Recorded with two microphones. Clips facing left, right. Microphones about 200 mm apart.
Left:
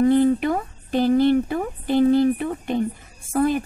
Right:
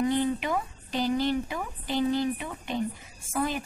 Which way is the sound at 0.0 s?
45° left (ahead or behind).